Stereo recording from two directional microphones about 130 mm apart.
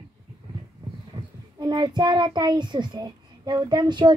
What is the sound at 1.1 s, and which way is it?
A child's voice, 35° right (ahead or behind).